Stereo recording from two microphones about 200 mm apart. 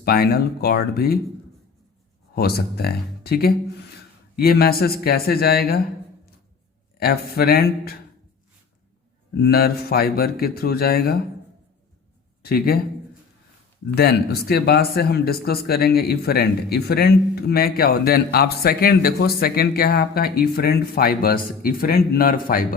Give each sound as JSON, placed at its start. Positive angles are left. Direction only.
{"t": 0.0, "sound": "speech", "side_deg": 50}
{"t": 2.3, "sound": "speech", "side_deg": 50}
{"t": 7.0, "sound": "speech", "side_deg": 50}
{"t": 9.4, "sound": "speech", "side_deg": 50}
{"t": 12.4, "sound": "speech", "side_deg": 50}
{"t": 13.9, "sound": "speech", "side_deg": 50}